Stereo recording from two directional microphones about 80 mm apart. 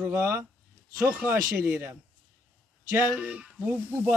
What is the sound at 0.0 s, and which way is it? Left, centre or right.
Speech, right.